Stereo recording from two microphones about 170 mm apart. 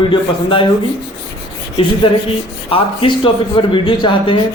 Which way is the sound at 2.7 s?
30° left (ahead or behind).